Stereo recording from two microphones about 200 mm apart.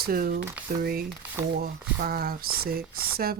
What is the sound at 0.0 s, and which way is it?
Speech, 50° right (ahead or behind).